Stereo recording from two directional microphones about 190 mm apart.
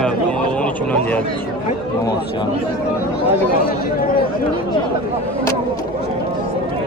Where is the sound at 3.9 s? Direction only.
50° left (ahead or behind).